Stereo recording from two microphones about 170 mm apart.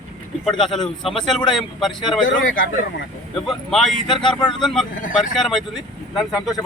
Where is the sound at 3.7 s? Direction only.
Centre (ahead or behind).